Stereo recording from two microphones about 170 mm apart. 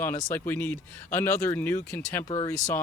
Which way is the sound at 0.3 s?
10° left (ahead or behind).